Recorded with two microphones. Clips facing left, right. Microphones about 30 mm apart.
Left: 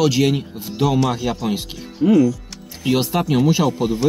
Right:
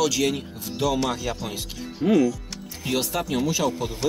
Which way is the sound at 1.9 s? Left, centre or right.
Centre.